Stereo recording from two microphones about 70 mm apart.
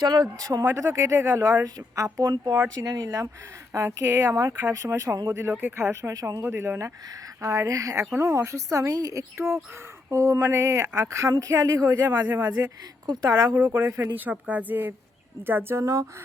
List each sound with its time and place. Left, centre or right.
0.1 s a woman's voice: right
0.6 s speech: right
1.6 s a woman's voice: right
2.8 s a woman's voice: right
4.0 s a woman's voice: right
6.1 s a woman's voice: right
6.4 s a woman's voice: right
8.2 s a woman's voice: right
12.0 s speech: right
13.1 s speech: right
13.7 s a woman's voice: right
14.3 s speech: right
15.8 s a woman's voice: right